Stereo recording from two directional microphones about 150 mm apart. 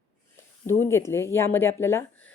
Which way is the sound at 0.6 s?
15° left (ahead or behind).